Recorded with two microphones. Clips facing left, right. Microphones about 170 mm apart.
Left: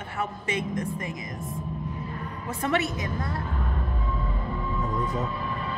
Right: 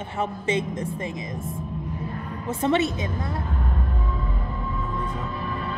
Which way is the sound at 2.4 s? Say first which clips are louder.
Right 5 dB; 25° right (ahead or behind).